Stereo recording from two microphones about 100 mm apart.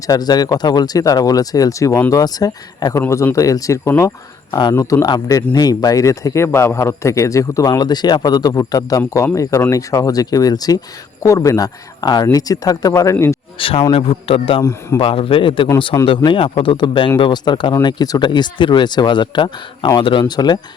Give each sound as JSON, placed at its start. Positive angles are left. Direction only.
{"t": 0.1, "sound": "speech", "side_deg": 40}
{"t": 5.0, "sound": "speech", "side_deg": 45}
{"t": 13.6, "sound": "a man's voice", "side_deg": 65}
{"t": 13.9, "sound": "a man's voice", "side_deg": 75}
{"t": 14.6, "sound": "speech", "side_deg": 30}
{"t": 15.0, "sound": "a man's voice", "side_deg": 65}